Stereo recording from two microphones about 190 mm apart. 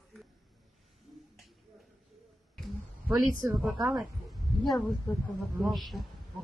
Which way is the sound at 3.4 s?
10° right (ahead or behind).